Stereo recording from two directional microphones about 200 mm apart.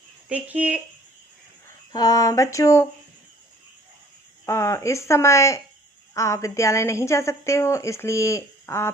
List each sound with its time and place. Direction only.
0.3 s speech: 5° right (ahead or behind)
1.9 s a woman's voice: 20° left (ahead or behind)
4.4 s a woman's voice: 15° left (ahead or behind)